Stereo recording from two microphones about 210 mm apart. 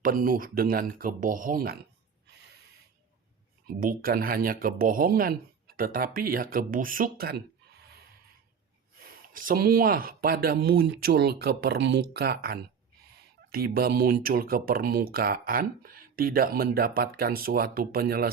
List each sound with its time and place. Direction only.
0.0 s speech: 40° right (ahead or behind)
3.7 s speech: 45° right (ahead or behind)
9.0 s speech: 40° right (ahead or behind)